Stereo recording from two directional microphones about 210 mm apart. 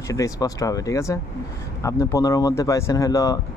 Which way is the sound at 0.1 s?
15° left (ahead or behind).